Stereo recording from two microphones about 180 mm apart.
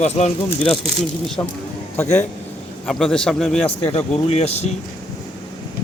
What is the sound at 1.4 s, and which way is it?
Speech, 20° left (ahead or behind).